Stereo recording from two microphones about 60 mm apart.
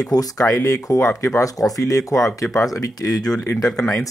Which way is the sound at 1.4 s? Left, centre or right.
Left.